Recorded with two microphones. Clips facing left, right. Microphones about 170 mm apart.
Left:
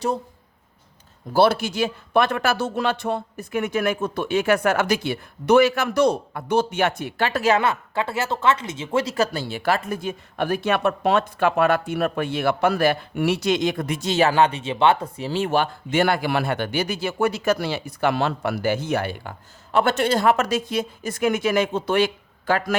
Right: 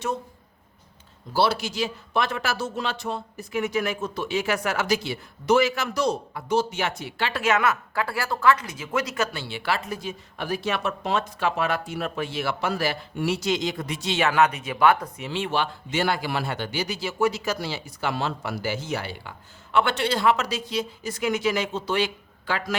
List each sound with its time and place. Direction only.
1.3 s speech: 55° left (ahead or behind)
19.7 s speech: 45° left (ahead or behind)